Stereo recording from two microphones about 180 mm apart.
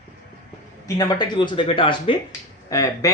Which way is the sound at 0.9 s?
25° left (ahead or behind).